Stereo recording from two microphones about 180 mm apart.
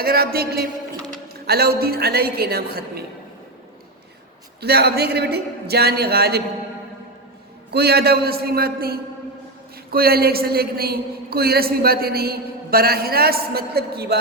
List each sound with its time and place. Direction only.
0.0 s a man's voice: 60° right (ahead or behind)
4.6 s a man's voice: 60° right (ahead or behind)
7.7 s a man's voice: 60° right (ahead or behind)